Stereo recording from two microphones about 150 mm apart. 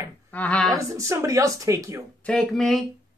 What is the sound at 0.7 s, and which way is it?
Speech, 20° right (ahead or behind).